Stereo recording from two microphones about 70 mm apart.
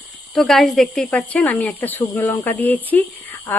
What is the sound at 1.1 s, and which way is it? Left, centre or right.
Speech, centre.